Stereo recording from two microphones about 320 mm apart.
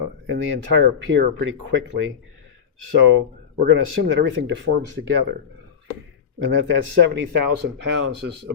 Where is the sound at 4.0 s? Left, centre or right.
Right.